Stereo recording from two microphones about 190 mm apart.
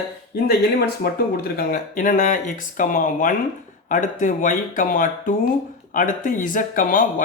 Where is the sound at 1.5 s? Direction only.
50° left (ahead or behind).